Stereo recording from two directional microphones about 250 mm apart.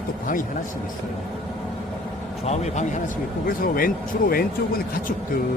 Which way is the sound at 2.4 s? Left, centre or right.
Left.